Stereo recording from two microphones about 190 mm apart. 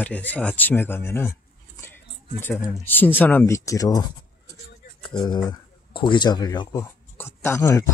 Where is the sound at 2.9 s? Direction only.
10° left (ahead or behind).